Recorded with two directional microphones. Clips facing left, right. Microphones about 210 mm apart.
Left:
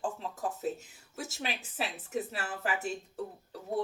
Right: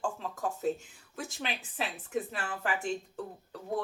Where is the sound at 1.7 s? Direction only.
5° left (ahead or behind).